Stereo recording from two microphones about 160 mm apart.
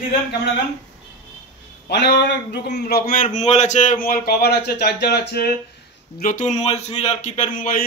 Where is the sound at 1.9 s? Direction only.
90° left.